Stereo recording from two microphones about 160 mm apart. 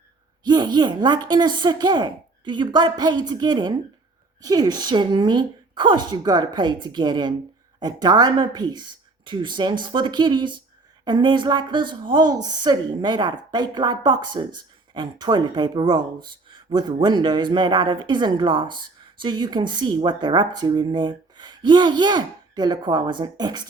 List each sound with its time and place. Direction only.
0.4 s a woman's voice: 25° right (ahead or behind)